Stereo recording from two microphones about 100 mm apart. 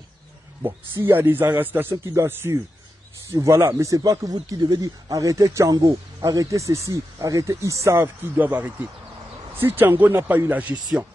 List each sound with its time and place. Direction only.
0.6 s a man's voice: 25° right (ahead or behind)